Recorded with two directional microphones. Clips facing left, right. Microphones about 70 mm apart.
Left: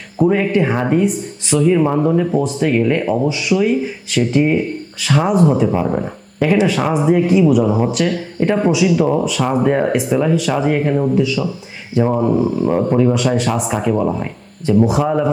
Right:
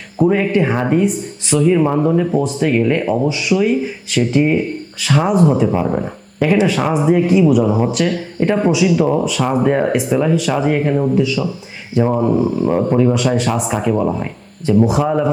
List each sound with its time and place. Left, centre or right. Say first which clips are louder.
0.2 s speech: even; centre